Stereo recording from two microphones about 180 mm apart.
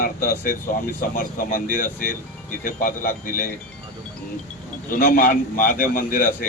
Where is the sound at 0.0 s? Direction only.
50° left (ahead or behind).